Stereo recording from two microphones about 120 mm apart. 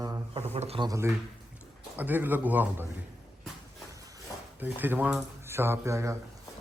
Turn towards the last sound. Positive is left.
turn(degrees=-25)  # may be behind; listen again after turning